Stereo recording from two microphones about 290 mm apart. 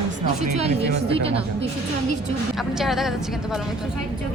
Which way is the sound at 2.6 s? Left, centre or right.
Centre.